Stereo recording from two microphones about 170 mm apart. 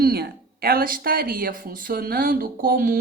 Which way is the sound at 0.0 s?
65° right (ahead or behind).